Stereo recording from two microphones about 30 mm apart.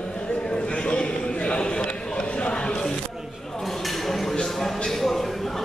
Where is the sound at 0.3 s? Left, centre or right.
Left.